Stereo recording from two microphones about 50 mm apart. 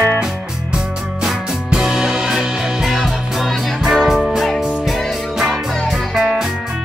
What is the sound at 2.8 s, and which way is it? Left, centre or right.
Music, centre.